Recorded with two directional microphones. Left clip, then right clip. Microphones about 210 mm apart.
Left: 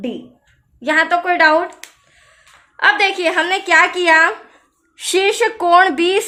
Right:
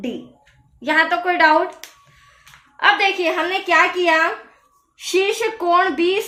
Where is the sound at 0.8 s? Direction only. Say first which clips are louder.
Left 2 dB; 25° left (ahead or behind).